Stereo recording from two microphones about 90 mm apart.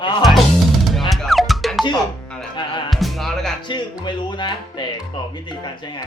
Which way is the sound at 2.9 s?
Centre (ahead or behind).